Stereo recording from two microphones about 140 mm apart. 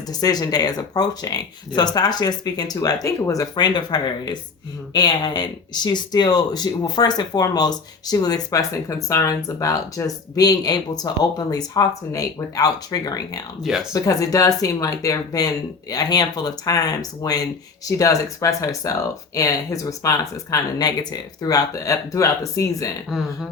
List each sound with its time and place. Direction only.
0.1 s speech: 25° left (ahead or behind)
13.6 s speech: centre (ahead or behind)
13.9 s speech: 25° left (ahead or behind)
23.0 s speech: centre (ahead or behind)